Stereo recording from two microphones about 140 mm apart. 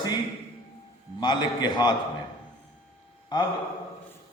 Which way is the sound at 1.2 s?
30° left (ahead or behind).